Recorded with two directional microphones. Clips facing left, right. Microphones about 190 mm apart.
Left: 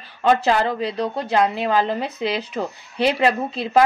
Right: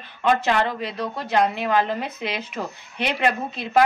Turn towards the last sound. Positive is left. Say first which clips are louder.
# left 3 dB
turn(degrees=30)  # may be behind; listen again after turning